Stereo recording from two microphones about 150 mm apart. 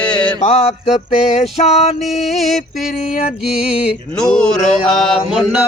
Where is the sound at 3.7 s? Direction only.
10° right (ahead or behind).